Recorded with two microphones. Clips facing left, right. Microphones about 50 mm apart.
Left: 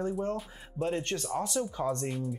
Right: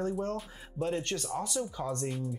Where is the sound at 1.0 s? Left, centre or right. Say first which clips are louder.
Left 2 dB; left.